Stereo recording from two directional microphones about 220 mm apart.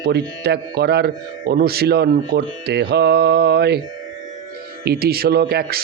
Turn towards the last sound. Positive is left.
turn(degrees=-45)  # may be behind; listen again after turning